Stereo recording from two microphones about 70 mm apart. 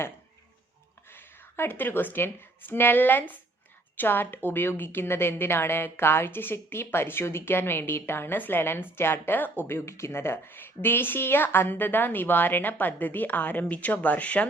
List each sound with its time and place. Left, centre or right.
1.1 s a woman's voice: left